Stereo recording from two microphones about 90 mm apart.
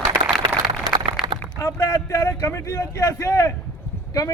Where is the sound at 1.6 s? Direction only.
35° left (ahead or behind).